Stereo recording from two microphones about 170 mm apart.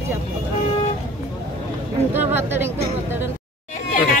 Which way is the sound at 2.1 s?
10° right (ahead or behind).